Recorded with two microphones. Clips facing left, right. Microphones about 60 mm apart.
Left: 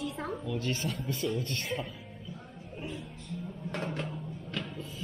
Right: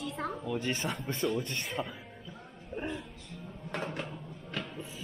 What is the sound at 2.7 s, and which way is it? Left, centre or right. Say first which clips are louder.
Music: right 4 dB; right.